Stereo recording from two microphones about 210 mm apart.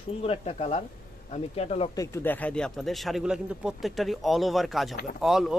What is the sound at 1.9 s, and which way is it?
Speech, 15° left (ahead or behind).